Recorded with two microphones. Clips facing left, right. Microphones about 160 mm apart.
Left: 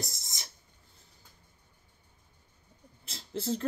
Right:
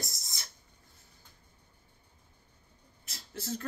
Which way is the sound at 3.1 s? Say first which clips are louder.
Left 6 dB; 25° left (ahead or behind).